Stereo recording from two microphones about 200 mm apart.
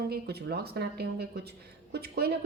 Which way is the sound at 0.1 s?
55° right (ahead or behind).